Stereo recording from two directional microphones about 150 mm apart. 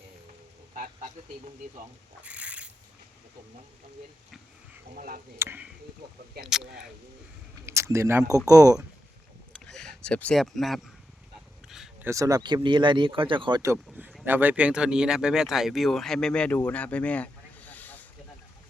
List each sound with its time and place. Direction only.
2.2 s a sound: 10° right (ahead or behind)
4.9 s speech: 65° right (ahead or behind)
5.4 s speech: 15° right (ahead or behind)
6.4 s speech: 5° right (ahead or behind)
7.6 s speech: 20° right (ahead or behind)
9.6 s speech: 5° left (ahead or behind)
12.0 s speech: 20° right (ahead or behind)
13.6 s speech: 15° right (ahead or behind); by 18.0 s 10° left (ahead or behind)